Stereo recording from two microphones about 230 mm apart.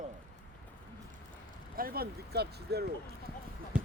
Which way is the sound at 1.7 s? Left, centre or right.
Right.